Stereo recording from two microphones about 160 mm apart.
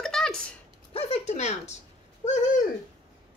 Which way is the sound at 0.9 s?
40° left (ahead or behind).